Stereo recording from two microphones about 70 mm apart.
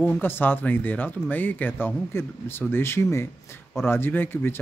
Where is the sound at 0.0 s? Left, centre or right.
Left.